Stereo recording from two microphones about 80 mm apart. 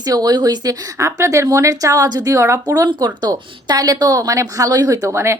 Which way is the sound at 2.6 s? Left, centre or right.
Right.